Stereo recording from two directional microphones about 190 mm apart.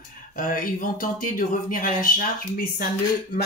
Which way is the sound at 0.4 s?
45° left (ahead or behind).